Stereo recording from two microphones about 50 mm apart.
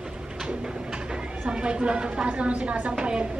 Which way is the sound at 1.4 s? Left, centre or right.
Right.